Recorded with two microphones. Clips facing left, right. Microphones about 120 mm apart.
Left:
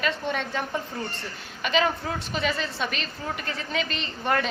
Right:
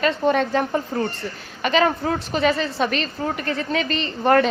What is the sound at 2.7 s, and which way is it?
A woman's voice, 45° right (ahead or behind).